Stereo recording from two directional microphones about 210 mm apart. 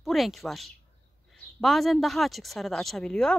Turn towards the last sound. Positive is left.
turn(degrees=5)  # may be behind; listen again after turning